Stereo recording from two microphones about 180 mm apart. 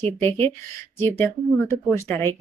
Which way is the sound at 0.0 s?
10° left (ahead or behind).